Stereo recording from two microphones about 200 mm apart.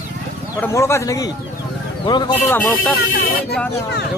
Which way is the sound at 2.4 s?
10° left (ahead or behind).